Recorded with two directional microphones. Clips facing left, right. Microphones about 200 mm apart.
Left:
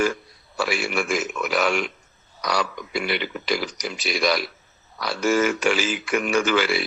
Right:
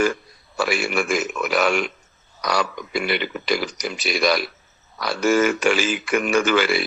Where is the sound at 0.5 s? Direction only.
50° right (ahead or behind).